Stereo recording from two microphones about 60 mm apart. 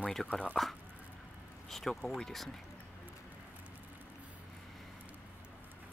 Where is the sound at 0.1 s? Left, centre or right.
Centre.